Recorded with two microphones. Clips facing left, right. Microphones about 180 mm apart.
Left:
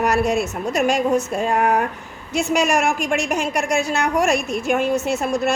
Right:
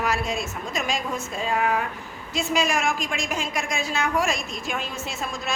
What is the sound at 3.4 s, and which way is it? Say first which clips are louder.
A woman's voice: left 8 dB; 70° left (ahead or behind).